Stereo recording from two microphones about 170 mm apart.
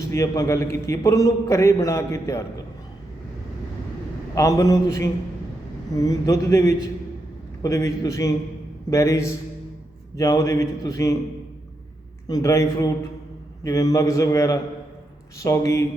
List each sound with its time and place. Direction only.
0.1 s a man's voice: 15° left (ahead or behind)
4.4 s a man's voice: 20° left (ahead or behind)
12.3 s a man's voice: 20° left (ahead or behind)